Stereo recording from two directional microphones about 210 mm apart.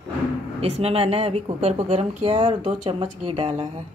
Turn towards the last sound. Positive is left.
turn(degrees=-30)  # may be behind; listen again after turning